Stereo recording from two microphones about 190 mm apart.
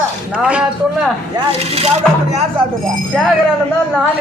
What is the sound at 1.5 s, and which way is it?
Speech, 30° right (ahead or behind).